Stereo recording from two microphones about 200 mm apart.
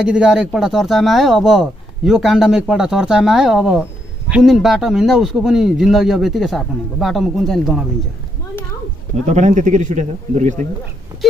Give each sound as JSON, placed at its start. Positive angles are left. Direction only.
{"t": 0.0, "sound": "speech", "side_deg": -5}
{"t": 9.3, "sound": "speech", "side_deg": -35}